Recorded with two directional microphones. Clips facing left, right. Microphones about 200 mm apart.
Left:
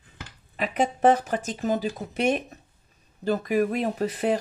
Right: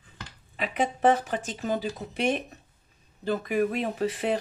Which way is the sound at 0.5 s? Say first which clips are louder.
Left 3 dB; 45° left (ahead or behind).